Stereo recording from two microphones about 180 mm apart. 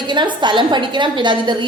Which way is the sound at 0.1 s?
25° right (ahead or behind).